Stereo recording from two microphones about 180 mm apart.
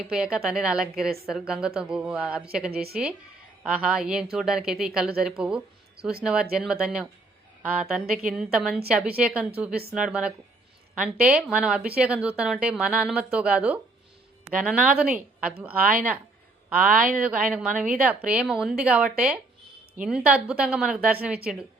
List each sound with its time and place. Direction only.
0.1 s a woman's voice: 5° right (ahead or behind)
16.9 s a woman's voice: 50° right (ahead or behind)
17.2 s a woman's voice: 5° right (ahead or behind)